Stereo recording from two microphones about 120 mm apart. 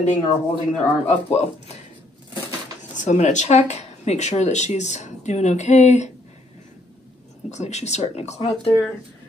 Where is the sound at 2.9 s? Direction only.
85° left.